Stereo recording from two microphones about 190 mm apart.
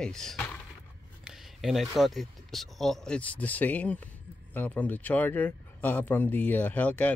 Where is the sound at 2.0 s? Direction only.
Centre (ahead or behind).